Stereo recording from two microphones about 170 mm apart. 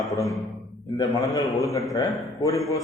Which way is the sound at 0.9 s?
20° left (ahead or behind).